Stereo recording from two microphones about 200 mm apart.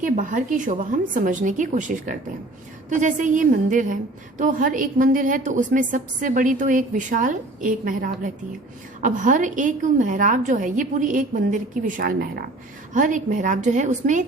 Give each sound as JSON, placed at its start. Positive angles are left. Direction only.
{"t": 0.0, "sound": "a woman's voice", "side_deg": -40}